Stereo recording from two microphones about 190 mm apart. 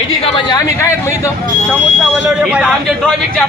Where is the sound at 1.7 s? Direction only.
5° right (ahead or behind).